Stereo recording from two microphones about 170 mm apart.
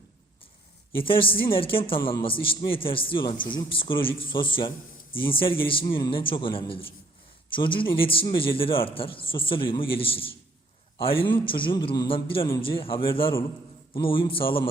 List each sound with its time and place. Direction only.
1.0 s a man's voice: 30° left (ahead or behind)